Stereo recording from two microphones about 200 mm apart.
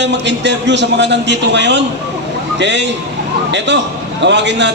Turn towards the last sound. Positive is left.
turn(degrees=-60)  # may be behind; listen again after turning